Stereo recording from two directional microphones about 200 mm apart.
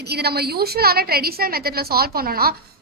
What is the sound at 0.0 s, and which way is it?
A woman's voice, 55° right (ahead or behind).